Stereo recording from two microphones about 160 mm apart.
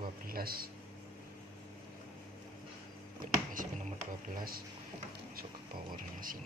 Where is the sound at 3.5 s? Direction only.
60° right (ahead or behind).